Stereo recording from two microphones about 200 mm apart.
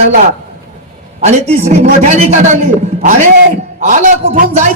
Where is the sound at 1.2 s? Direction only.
35° right (ahead or behind).